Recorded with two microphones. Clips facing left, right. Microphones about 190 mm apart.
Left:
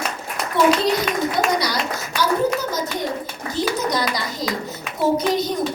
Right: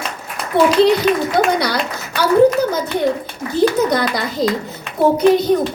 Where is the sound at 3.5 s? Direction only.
55° right (ahead or behind).